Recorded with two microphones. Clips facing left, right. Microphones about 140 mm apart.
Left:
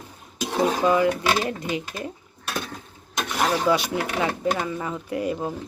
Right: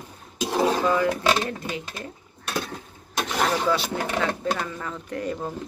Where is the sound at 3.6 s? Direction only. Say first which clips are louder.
Left 2 dB; 15° left (ahead or behind).